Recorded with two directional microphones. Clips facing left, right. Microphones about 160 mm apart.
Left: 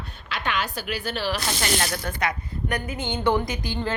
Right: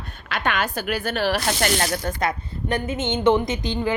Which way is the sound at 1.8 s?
30° right (ahead or behind).